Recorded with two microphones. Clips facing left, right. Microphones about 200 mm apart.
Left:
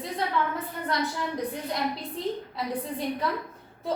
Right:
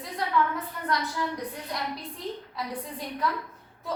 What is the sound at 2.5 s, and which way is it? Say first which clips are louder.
Speech: left 4 dB; 25° left (ahead or behind).